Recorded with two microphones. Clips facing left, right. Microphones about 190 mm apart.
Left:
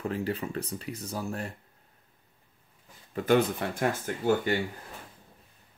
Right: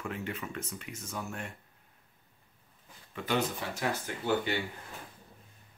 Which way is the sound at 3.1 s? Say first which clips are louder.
Left 7 dB; 50° left (ahead or behind).